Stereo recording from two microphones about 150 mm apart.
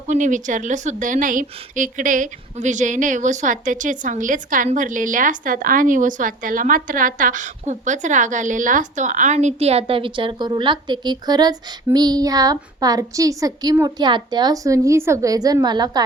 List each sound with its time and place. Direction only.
0.1 s a woman's voice: 55° right (ahead or behind); by 16.0 s 30° right (ahead or behind)